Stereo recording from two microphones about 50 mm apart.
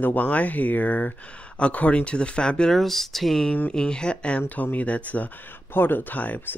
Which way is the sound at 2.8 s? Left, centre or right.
Centre.